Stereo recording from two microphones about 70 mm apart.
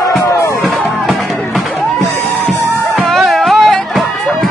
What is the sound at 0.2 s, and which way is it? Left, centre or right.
Music, left.